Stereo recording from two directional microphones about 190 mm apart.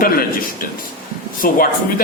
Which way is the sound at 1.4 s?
50° left (ahead or behind).